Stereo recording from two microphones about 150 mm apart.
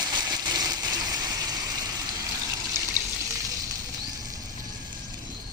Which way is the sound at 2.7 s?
15° right (ahead or behind).